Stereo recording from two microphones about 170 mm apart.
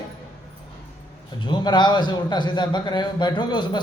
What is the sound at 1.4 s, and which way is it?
Speech, 25° left (ahead or behind).